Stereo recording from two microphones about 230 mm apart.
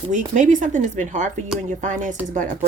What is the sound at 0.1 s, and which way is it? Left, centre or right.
Speech, right.